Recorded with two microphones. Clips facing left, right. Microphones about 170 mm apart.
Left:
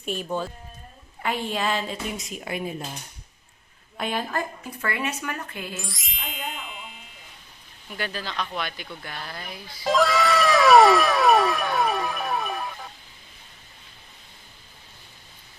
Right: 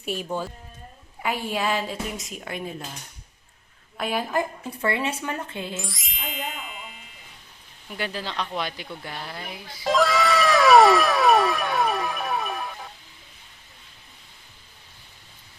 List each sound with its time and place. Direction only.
0.0 s a woman's voice: 5° right (ahead or behind); by 2.7 s 10° left (ahead or behind)
3.9 s speech: 5° right (ahead or behind)
4.9 s speech: 25° right (ahead or behind)
5.9 s music: centre (ahead or behind)
7.9 s speech: 25° right (ahead or behind)
9.1 s speech: 15° right (ahead or behind)
9.8 s cat: centre (ahead or behind)